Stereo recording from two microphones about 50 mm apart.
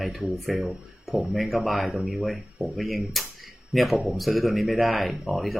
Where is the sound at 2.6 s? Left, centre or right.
Centre.